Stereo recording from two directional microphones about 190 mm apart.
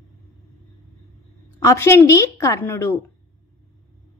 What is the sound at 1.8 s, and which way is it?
Speech, 15° left (ahead or behind).